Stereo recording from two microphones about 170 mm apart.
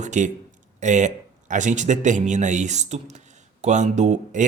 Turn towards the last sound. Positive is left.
turn(degrees=-45)  # may be behind; listen again after turning